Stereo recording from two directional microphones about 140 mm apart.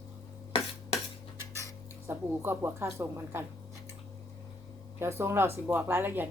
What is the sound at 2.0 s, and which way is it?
Speech, 15° right (ahead or behind).